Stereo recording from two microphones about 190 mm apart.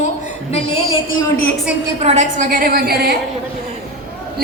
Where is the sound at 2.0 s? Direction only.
35° right (ahead or behind); by 3.1 s 55° right (ahead or behind).